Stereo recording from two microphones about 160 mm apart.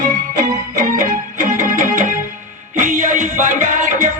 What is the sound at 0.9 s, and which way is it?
Music, 55° right (ahead or behind).